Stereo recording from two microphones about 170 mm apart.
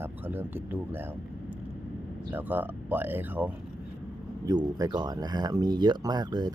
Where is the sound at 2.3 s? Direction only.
10° right (ahead or behind).